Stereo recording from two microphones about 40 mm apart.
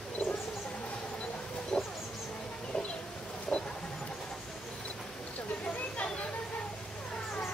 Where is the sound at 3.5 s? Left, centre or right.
Centre.